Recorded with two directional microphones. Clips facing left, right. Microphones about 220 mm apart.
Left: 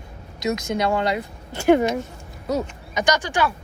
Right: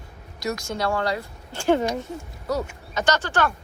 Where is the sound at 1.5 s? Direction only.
10° left (ahead or behind).